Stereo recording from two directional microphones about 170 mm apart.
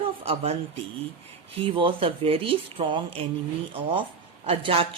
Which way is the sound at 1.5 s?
30° right (ahead or behind).